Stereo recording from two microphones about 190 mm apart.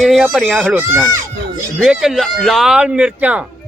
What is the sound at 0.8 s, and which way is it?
A man's voice, 10° right (ahead or behind).